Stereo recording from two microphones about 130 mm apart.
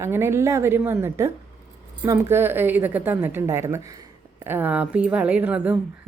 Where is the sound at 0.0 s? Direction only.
20° right (ahead or behind).